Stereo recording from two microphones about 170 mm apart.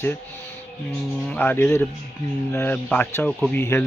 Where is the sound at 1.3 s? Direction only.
10° left (ahead or behind).